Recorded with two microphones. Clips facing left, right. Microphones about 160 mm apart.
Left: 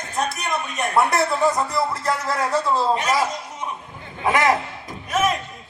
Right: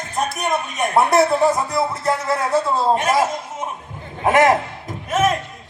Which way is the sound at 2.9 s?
55° right (ahead or behind).